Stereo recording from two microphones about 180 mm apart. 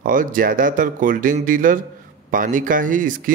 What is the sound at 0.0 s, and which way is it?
Speech, 50° right (ahead or behind).